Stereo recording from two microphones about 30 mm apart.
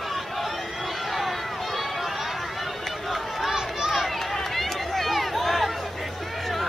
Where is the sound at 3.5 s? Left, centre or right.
Centre.